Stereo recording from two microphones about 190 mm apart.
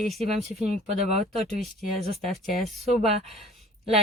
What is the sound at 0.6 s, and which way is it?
Speech, 35° right (ahead or behind).